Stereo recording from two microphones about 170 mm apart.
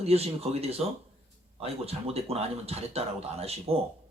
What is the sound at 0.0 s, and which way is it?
Speech, 35° right (ahead or behind).